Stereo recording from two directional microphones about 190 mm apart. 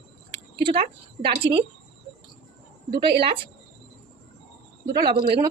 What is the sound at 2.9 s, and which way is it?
Speech, 25° right (ahead or behind).